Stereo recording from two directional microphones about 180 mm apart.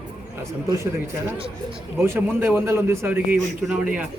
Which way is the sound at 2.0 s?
15° right (ahead or behind).